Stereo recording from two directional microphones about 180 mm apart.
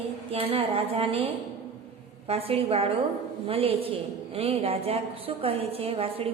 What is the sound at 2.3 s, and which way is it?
A woman's voice, 30° right (ahead or behind).